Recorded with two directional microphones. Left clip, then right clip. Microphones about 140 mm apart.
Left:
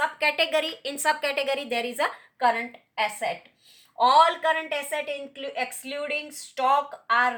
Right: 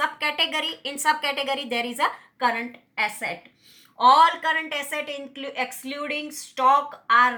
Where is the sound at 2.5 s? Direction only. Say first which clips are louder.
Right 1 dB; 15° left (ahead or behind).